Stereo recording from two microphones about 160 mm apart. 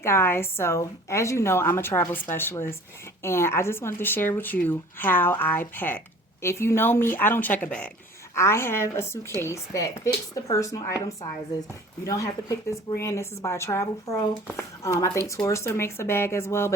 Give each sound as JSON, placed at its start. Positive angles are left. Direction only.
{"t": 0.0, "sound": "a woman's voice", "side_deg": 15}